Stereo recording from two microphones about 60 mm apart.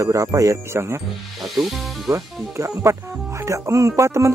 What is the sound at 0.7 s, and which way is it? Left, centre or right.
Speech, right.